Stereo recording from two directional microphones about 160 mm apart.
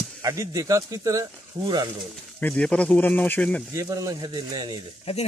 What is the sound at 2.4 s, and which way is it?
Speech, 10° left (ahead or behind).